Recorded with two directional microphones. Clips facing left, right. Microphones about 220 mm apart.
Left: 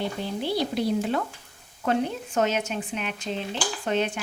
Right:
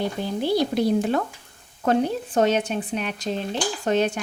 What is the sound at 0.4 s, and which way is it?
Speech, 45° right (ahead or behind).